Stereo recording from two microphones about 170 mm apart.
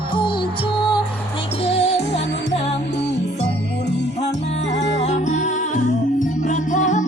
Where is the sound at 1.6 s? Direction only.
35° left (ahead or behind).